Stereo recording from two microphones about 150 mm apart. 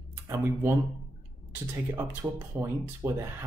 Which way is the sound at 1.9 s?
15° right (ahead or behind).